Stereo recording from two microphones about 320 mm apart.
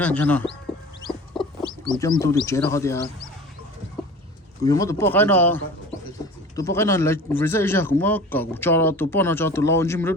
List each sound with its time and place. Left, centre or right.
0.0 s speech: centre
1.0 s chicken: centre
2.0 s speech: centre
4.6 s speech: centre
6.6 s speech: centre